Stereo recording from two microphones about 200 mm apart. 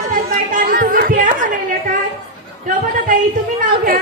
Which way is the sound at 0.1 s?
40° right (ahead or behind).